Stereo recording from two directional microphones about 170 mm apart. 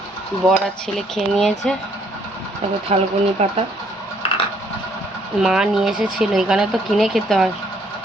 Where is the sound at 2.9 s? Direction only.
40° right (ahead or behind).